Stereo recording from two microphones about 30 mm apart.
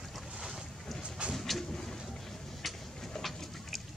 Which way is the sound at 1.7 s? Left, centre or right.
Centre.